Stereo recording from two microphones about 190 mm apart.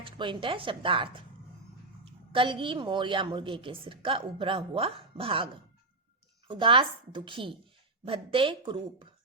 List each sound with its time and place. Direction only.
0.0 s a woman's voice: 25° right (ahead or behind)
2.3 s a woman's voice: 25° right (ahead or behind)
6.5 s a woman's voice: 25° right (ahead or behind)